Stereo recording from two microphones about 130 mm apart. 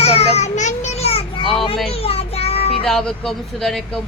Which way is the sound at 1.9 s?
50° left (ahead or behind).